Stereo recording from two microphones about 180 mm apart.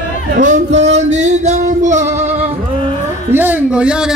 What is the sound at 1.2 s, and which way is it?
Music, 40° right (ahead or behind).